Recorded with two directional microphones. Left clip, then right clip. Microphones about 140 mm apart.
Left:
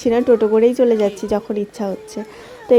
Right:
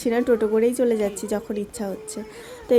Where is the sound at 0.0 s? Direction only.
20° left (ahead or behind).